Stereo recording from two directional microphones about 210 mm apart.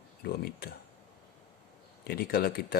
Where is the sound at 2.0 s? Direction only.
45° left (ahead or behind).